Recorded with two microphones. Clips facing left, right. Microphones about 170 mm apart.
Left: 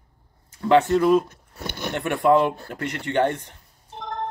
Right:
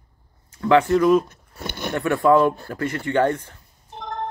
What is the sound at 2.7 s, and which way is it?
Speech, 20° left (ahead or behind).